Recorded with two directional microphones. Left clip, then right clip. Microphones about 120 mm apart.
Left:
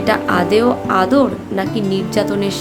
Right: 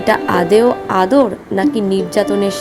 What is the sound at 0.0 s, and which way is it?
Speech, 35° right (ahead or behind).